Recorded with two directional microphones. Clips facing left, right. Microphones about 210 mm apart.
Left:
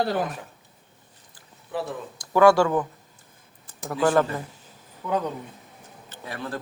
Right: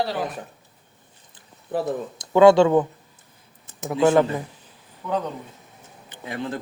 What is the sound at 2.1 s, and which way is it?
Speech, 20° right (ahead or behind).